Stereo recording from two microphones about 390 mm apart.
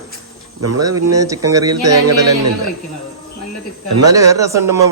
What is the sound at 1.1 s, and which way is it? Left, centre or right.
Speech, centre.